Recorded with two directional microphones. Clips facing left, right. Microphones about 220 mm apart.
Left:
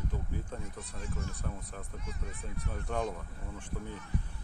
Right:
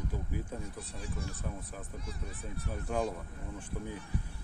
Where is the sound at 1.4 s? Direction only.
5° right (ahead or behind).